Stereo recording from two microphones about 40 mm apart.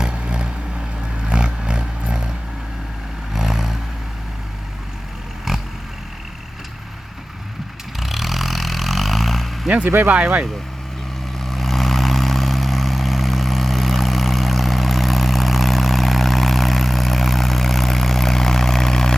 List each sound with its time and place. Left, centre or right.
0.0 s vehicle: right
1.2 s a sound: right
3.3 s vehicle: centre
5.5 s a sound: centre
7.9 s vehicle: centre
11.4 s vehicle: centre